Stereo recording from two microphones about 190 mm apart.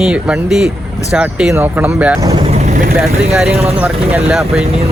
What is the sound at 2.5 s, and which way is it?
Vehicle, 35° right (ahead or behind).